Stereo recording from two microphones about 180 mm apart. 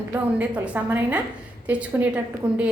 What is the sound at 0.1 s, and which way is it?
A woman's voice, 10° right (ahead or behind).